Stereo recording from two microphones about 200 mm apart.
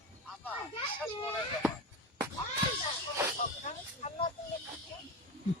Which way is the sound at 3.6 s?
35° left (ahead or behind).